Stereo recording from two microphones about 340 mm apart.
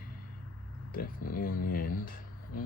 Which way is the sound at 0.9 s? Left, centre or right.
Left.